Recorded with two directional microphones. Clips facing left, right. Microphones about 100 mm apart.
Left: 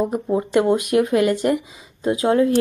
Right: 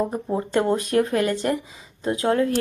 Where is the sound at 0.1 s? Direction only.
15° left (ahead or behind).